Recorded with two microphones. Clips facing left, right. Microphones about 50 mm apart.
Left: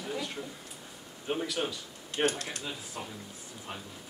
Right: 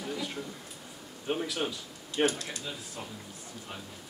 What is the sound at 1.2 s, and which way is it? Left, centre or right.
Speech, centre.